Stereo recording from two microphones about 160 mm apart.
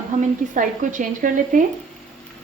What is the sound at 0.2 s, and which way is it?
A woman's voice, 55° right (ahead or behind).